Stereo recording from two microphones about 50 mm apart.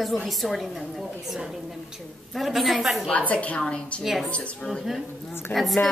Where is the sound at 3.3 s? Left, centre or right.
Left.